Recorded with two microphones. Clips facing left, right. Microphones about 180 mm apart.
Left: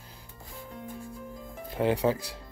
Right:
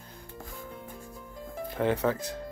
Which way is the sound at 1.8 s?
10° left (ahead or behind).